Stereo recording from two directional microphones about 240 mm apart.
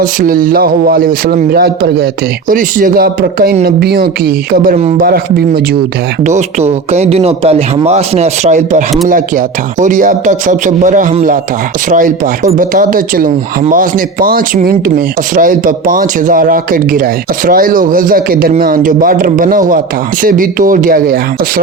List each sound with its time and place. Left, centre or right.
0.0 s speech: right
6.2 s speech: right